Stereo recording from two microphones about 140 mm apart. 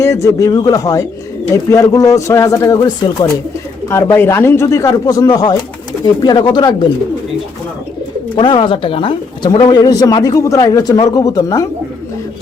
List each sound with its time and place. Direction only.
0.0 s a man's voice: 20° left (ahead or behind)
8.4 s a man's voice: 35° left (ahead or behind)